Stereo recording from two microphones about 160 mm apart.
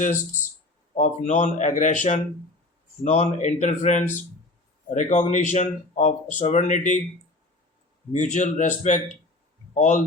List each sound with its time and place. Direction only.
0.9 s speech: 45° left (ahead or behind)
8.1 s speech: 50° left (ahead or behind)